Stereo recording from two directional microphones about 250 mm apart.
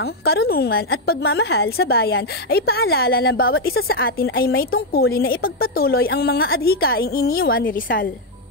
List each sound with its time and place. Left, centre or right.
0.0 s a woman's voice: left